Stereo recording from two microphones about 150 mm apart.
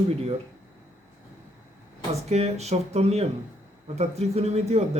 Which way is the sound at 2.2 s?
45° right (ahead or behind).